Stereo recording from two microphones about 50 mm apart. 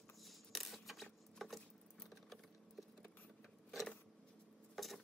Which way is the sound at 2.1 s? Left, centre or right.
Centre.